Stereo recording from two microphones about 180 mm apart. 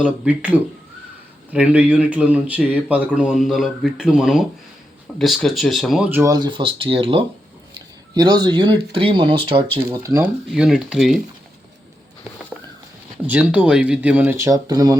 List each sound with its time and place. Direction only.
0.0 s speech: 10° right (ahead or behind)
6.2 s speech: 20° right (ahead or behind)
9.9 s speech: 15° right (ahead or behind)
10.2 s speech: 5° right (ahead or behind)
13.2 s speech: 10° right (ahead or behind)